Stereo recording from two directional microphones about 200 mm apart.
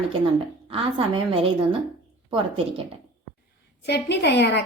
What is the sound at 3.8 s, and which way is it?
Speech, 60° left (ahead or behind).